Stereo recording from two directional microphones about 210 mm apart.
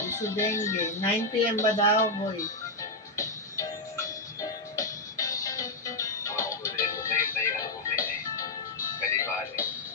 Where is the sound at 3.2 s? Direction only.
15° left (ahead or behind).